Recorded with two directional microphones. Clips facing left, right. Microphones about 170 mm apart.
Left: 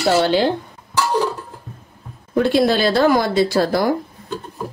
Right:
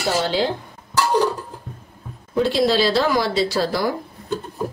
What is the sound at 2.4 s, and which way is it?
Speech, 55° left (ahead or behind).